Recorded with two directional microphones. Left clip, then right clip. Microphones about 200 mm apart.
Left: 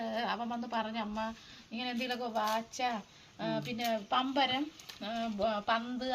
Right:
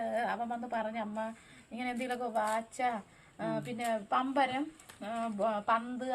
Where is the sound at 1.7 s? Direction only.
25° right (ahead or behind).